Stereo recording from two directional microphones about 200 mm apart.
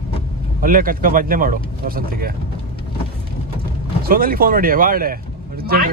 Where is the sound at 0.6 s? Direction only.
45° right (ahead or behind).